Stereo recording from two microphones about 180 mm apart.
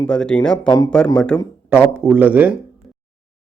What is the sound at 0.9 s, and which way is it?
Speech, 5° left (ahead or behind).